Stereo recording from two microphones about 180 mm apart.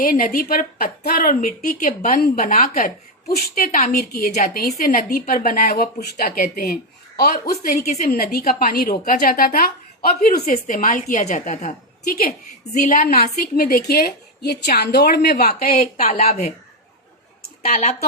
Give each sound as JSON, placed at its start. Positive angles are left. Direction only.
{"t": 0.0, "sound": "a woman's voice", "side_deg": 50}
{"t": 15.8, "sound": "speech", "side_deg": 40}
{"t": 17.6, "sound": "speech", "side_deg": 40}